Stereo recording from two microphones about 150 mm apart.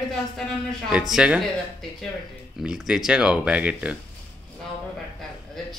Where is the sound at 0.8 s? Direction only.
5° right (ahead or behind).